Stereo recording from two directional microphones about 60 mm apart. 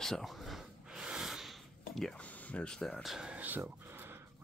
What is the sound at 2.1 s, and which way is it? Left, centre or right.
Speech, left.